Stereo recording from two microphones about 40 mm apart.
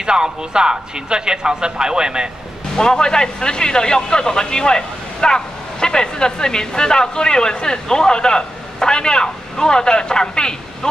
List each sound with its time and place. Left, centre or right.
0.0 s speech: centre
2.8 s speech: centre